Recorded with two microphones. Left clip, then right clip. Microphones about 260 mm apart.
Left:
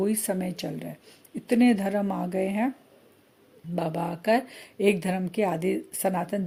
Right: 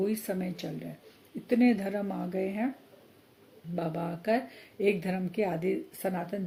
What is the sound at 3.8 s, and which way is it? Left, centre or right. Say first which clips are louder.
Speech: left 5 dB; left.